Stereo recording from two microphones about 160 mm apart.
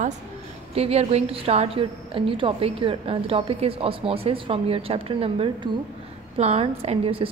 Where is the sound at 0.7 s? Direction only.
40° right (ahead or behind).